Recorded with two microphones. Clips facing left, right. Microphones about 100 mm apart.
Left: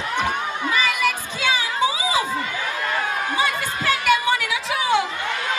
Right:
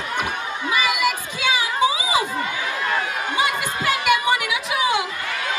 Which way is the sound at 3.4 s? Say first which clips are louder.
Right 1 dB; 15° right (ahead or behind).